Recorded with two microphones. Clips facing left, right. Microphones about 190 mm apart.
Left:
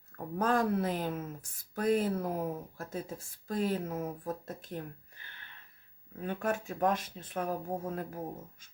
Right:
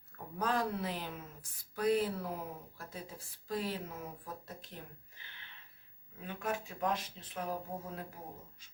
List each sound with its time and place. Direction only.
0.3 s speech: 50° left (ahead or behind)